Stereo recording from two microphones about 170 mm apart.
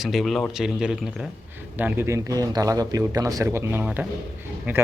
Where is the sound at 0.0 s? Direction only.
Centre (ahead or behind).